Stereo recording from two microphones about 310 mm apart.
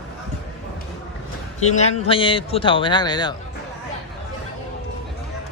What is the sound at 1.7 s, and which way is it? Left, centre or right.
A man's voice, left.